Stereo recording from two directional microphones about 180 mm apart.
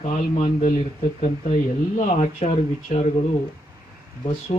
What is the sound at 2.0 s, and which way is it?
Speech, 35° left (ahead or behind).